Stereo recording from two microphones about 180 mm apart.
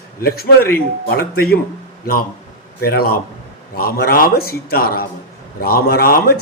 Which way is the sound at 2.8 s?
60° left (ahead or behind).